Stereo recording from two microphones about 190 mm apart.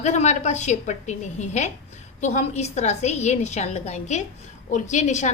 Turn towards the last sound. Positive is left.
turn(degrees=40)  # may be behind; listen again after turning